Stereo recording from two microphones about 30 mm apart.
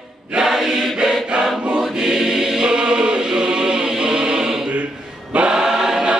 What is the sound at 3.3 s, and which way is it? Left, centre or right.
Chant, right.